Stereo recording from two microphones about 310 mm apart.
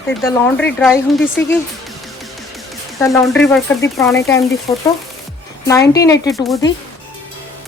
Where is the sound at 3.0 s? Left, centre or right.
Centre.